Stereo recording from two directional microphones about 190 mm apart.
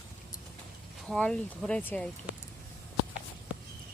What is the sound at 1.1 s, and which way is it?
Speech, 5° left (ahead or behind).